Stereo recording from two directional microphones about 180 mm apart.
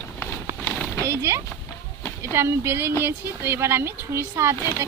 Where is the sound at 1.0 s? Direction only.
15° right (ahead or behind).